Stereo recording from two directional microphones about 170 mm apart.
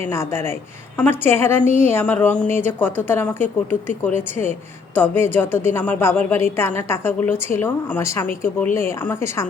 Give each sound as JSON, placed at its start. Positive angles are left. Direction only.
{"t": 0.0, "sound": "speech", "side_deg": 15}